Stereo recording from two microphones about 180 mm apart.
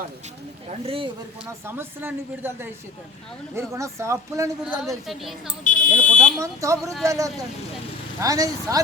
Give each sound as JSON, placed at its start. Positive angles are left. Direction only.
{"t": 0.7, "sound": "speech", "side_deg": -30}
{"t": 1.6, "sound": "speech", "side_deg": -10}
{"t": 4.7, "sound": "a woman's voice", "side_deg": 0}
{"t": 5.7, "sound": "speech", "side_deg": 45}
{"t": 6.0, "sound": "a woman's voice", "side_deg": 5}
{"t": 6.4, "sound": "speech", "side_deg": -15}